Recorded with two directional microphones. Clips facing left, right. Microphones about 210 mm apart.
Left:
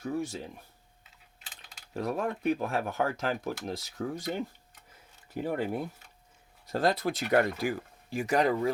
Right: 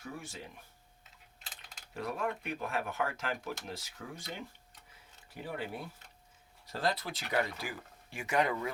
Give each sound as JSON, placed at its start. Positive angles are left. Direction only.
{"t": 0.0, "sound": "speech", "side_deg": 40}
{"t": 1.9, "sound": "speech", "side_deg": 40}
{"t": 6.7, "sound": "speech", "side_deg": 45}